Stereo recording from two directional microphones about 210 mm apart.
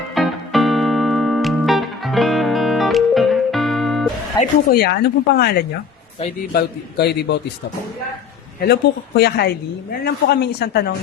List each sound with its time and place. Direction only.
0.1 s music: centre (ahead or behind)
4.4 s speech: 15° left (ahead or behind)
4.7 s speech: 50° left (ahead or behind)
8.6 s speech: 50° left (ahead or behind)